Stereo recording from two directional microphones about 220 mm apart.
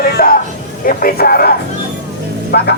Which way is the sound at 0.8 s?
40° left (ahead or behind).